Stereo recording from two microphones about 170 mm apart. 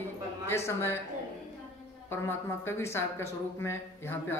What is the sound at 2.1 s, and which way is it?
Speech, 15° left (ahead or behind).